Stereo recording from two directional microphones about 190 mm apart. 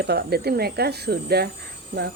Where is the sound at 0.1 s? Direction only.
60° right (ahead or behind).